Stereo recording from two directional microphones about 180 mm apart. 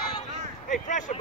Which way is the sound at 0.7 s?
45° left (ahead or behind).